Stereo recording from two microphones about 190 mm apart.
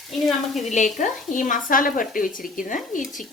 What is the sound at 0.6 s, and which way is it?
Speech, 40° left (ahead or behind).